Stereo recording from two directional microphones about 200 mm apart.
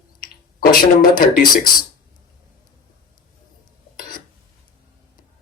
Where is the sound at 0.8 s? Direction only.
45° left (ahead or behind).